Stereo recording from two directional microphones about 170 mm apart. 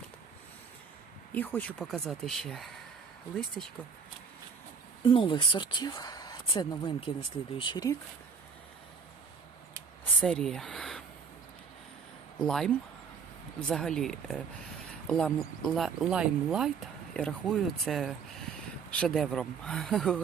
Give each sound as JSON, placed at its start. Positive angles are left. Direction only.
{"t": 1.3, "sound": "speech", "side_deg": 10}
{"t": 5.0, "sound": "speech", "side_deg": 30}
{"t": 10.2, "sound": "speech", "side_deg": 5}
{"t": 12.4, "sound": "speech", "side_deg": 5}